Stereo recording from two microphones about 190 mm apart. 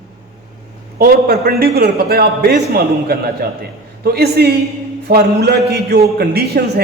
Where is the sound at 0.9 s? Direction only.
50° right (ahead or behind).